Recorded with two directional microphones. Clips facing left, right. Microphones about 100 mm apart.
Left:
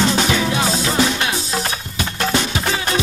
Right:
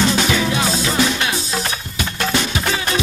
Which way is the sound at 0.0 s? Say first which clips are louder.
Even; 35° left (ahead or behind).